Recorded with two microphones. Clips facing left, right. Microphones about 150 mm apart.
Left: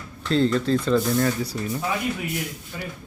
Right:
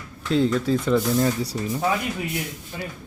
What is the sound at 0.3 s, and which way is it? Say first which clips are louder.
Speech: even; 10° right (ahead or behind).